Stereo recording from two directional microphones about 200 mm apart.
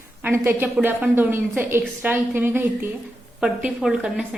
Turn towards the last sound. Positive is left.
turn(degrees=0)  # may be behind; listen again after turning